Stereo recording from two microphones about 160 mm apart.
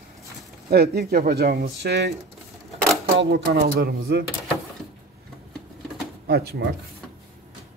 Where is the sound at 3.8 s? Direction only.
75° right (ahead or behind).